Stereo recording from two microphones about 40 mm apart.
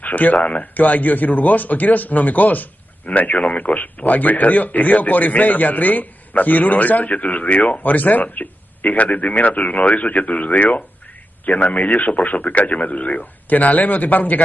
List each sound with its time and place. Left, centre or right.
0.0 s a man's voice: left